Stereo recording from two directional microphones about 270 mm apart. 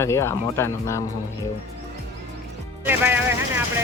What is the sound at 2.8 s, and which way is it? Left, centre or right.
Vehicle, centre.